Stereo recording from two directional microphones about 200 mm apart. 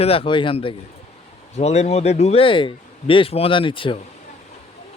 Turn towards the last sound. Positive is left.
turn(degrees=25)  # may be behind; listen again after turning